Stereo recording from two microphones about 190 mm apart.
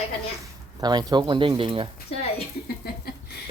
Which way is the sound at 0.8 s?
20° right (ahead or behind).